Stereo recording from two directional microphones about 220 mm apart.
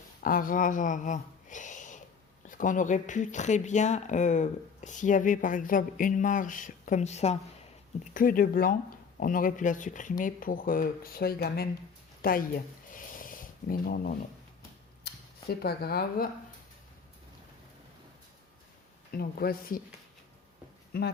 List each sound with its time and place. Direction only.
0.2 s speech: 40° left (ahead or behind)
12.2 s a sound: 40° left (ahead or behind)
15.0 s speech: 45° left (ahead or behind)
19.1 s speech: 45° left (ahead or behind)
20.9 s speech: 45° left (ahead or behind)